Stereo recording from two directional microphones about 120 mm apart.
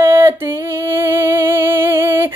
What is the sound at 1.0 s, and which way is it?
Music, 20° right (ahead or behind).